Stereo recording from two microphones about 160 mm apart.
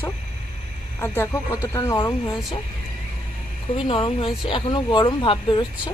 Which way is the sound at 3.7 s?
30° left (ahead or behind).